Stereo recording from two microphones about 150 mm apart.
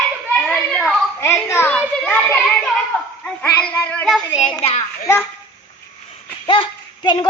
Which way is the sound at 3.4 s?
15° left (ahead or behind).